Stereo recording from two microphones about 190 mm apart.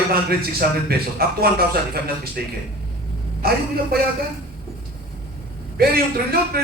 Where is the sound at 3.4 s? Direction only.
55° right (ahead or behind).